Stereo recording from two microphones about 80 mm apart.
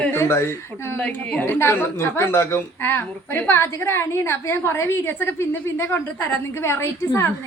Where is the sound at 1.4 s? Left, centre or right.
Left.